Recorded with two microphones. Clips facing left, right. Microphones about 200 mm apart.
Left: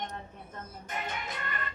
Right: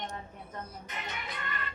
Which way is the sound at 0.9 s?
45° left (ahead or behind).